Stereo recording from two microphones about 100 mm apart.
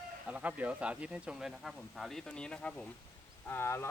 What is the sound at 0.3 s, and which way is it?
Cutlery, 15° right (ahead or behind).